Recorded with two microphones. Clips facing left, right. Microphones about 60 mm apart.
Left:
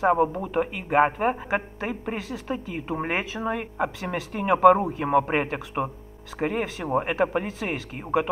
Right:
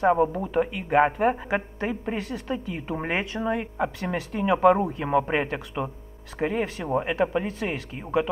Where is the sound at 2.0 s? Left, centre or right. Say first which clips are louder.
Right 1 dB; left.